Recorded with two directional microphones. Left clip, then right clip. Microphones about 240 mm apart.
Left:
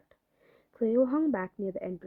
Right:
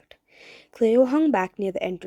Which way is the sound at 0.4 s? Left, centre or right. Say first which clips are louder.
Right 9 dB; right.